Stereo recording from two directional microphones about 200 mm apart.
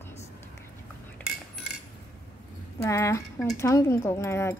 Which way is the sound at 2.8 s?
15° left (ahead or behind).